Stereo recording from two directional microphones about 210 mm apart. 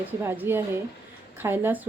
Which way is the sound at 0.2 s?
10° right (ahead or behind).